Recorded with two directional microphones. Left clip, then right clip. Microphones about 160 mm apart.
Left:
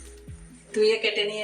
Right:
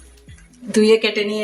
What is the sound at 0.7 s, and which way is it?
Speech, 50° right (ahead or behind).